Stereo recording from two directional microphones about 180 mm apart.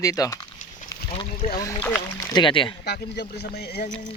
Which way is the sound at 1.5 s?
15° left (ahead or behind).